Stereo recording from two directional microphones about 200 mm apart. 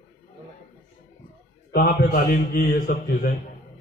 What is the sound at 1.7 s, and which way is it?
A man's voice, 50° left (ahead or behind).